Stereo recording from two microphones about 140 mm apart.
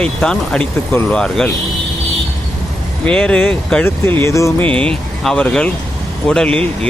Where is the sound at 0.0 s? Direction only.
5° left (ahead or behind).